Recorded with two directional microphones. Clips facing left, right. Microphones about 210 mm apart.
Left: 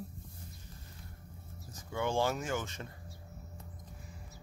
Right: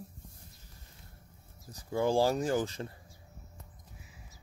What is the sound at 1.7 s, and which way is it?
Speech, 35° right (ahead or behind).